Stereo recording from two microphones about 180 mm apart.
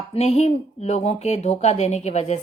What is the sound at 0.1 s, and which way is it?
A woman's voice, 35° left (ahead or behind).